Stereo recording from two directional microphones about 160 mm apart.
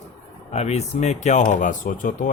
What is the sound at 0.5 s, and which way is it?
Speech, 45° left (ahead or behind).